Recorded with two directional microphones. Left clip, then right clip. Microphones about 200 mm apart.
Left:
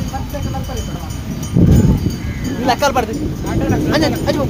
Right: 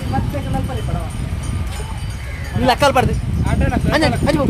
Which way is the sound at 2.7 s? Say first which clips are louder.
Right 1 dB; 45° right (ahead or behind).